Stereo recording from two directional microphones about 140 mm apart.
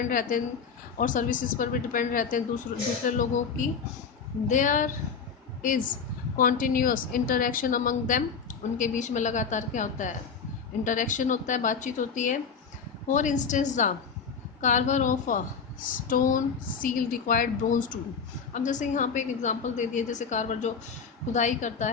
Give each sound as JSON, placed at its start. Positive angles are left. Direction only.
{"t": 0.1, "sound": "a woman's voice", "side_deg": 70}
{"t": 6.3, "sound": "a woman's voice", "side_deg": 85}
{"t": 15.8, "sound": "a woman's voice", "side_deg": 75}